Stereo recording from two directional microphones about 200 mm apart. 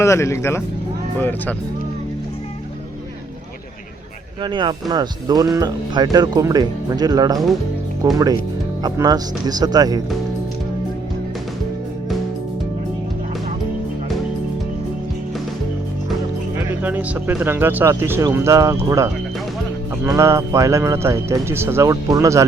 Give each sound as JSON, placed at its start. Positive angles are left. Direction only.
{"t": 0.0, "sound": "speech", "side_deg": 15}
{"t": 4.4, "sound": "speech", "side_deg": -20}
{"t": 16.8, "sound": "speech", "side_deg": -10}